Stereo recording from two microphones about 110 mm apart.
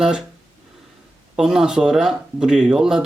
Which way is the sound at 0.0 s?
5° right (ahead or behind).